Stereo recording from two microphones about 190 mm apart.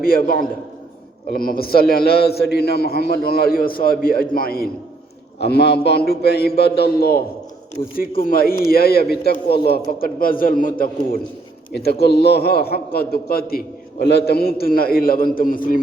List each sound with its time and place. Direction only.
0.0 s a man's voice: 50° left (ahead or behind)